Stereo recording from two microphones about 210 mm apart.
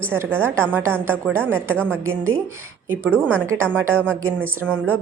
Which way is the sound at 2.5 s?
10° right (ahead or behind).